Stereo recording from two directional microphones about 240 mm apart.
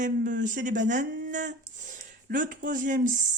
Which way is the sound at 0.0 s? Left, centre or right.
Right.